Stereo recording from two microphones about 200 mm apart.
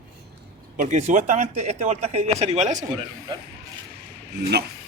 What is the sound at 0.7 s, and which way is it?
A man's voice, 35° right (ahead or behind).